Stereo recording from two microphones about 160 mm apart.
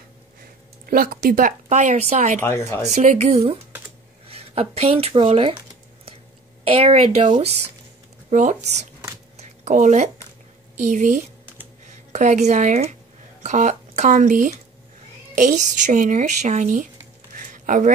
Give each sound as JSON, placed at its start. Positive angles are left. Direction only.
{"t": 0.8, "sound": "speech", "side_deg": -65}
{"t": 2.4, "sound": "speech", "side_deg": 15}
{"t": 2.8, "sound": "speech", "side_deg": -45}
{"t": 6.6, "sound": "a woman's voice", "side_deg": -35}
{"t": 9.4, "sound": "a sound", "side_deg": -45}
{"t": 10.8, "sound": "speech", "side_deg": -50}
{"t": 17.4, "sound": "a sound", "side_deg": -55}